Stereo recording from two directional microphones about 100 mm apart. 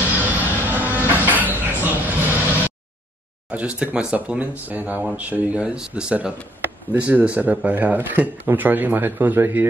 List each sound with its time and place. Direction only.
0.2 s train: 15° right (ahead or behind)
3.4 s speech: 15° right (ahead or behind)